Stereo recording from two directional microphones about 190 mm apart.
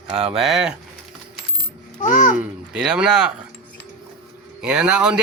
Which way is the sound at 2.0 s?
45° left (ahead or behind).